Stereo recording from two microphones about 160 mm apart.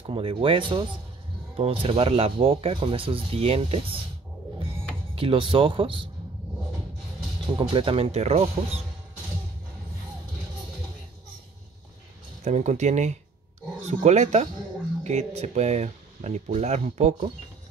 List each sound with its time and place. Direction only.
0.0 s speech: 35° right (ahead or behind)
5.1 s speech: 35° right (ahead or behind)
7.5 s speech: 35° right (ahead or behind)
12.4 s speech: 45° right (ahead or behind)